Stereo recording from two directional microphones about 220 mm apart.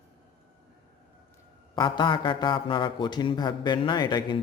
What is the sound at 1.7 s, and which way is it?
A man's voice, 20° left (ahead or behind).